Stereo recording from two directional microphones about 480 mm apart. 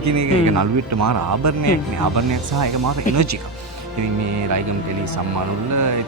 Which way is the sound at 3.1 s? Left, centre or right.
Right.